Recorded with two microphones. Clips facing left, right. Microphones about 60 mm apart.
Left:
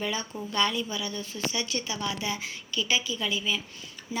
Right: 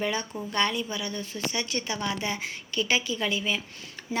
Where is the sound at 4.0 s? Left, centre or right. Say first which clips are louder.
Right 4 dB; right.